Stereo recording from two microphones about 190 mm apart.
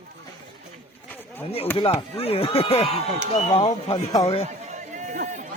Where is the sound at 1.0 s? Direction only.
10° left (ahead or behind).